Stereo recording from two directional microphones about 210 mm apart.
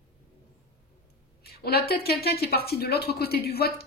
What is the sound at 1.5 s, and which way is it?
A woman's voice, 50° left (ahead or behind).